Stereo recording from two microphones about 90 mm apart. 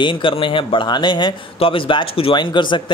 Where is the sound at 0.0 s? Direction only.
70° left (ahead or behind).